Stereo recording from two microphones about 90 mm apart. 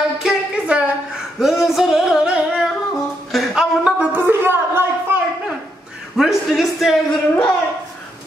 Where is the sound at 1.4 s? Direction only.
5° right (ahead or behind).